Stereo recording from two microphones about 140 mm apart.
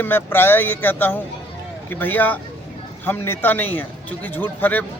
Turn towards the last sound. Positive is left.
turn(degrees=10)  # may be behind; listen again after turning